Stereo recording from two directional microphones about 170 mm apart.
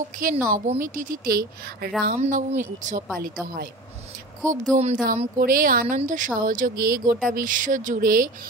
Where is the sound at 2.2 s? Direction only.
45° right (ahead or behind).